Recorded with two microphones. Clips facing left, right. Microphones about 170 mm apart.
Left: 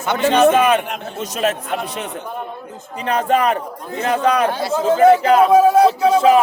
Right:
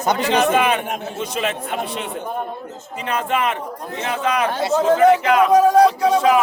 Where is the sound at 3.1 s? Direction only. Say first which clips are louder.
Left 5 dB; 40° left (ahead or behind).